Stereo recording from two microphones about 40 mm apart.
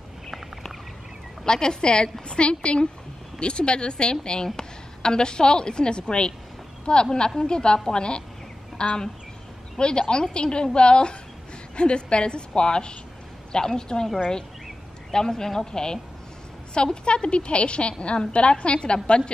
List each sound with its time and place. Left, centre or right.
1.4 s a woman's voice: centre
15.1 s a woman's voice: centre